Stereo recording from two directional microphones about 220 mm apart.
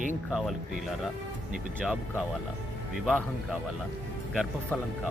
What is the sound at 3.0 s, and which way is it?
A man's voice, centre (ahead or behind).